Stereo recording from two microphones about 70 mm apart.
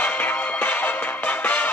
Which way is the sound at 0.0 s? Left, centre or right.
Left.